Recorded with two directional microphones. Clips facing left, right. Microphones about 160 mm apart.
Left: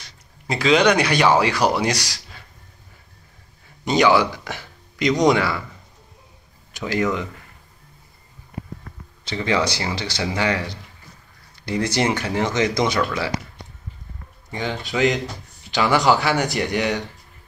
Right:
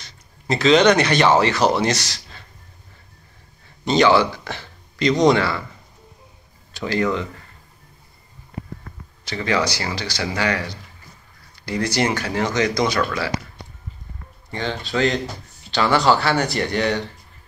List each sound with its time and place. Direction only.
0.5 s speech: 10° left (ahead or behind)
3.8 s speech: 15° left (ahead or behind)
6.7 s speech: 15° left (ahead or behind)
9.3 s speech: 20° left (ahead or behind)
14.5 s speech: 15° left (ahead or behind)